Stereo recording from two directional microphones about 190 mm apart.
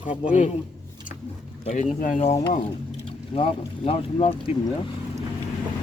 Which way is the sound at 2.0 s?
40° left (ahead or behind).